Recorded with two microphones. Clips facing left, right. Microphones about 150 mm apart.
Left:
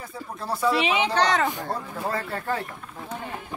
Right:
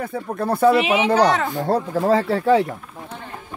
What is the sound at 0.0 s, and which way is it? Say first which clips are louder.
Speech: right 10 dB; 60° right (ahead or behind).